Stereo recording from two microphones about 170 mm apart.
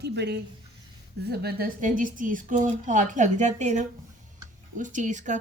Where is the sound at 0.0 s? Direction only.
80° right.